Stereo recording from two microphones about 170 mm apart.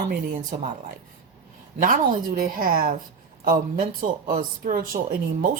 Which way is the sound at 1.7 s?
55° right (ahead or behind).